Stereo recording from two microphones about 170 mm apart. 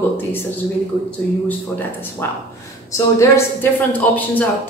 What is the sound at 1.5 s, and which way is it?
A woman's voice, 10° left (ahead or behind).